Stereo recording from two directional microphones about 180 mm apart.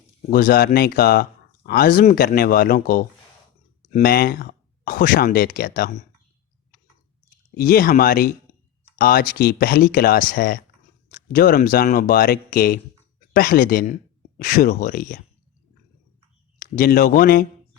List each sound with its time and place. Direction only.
0.3 s speech: 65° left (ahead or behind); by 2.1 s 45° left (ahead or behind)
2.1 s speech: 60° left (ahead or behind)
7.5 s speech: 55° left (ahead or behind)
16.7 s speech: 50° left (ahead or behind)